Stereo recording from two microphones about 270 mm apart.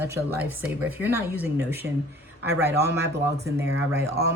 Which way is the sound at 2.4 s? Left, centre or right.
Right.